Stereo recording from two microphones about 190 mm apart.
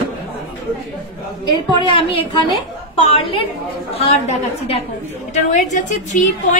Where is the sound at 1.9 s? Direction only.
30° left (ahead or behind).